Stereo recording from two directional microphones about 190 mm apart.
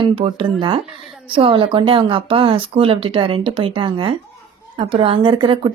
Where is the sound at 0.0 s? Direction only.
30° right (ahead or behind).